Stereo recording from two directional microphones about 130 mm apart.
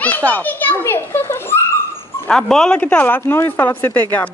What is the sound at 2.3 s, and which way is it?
Speech, 5° left (ahead or behind).